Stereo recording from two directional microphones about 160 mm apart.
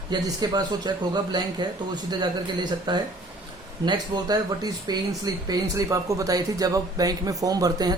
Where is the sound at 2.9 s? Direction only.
25° right (ahead or behind).